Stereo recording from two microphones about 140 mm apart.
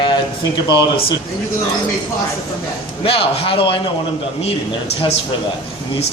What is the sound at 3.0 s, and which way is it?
Speech, 40° left (ahead or behind).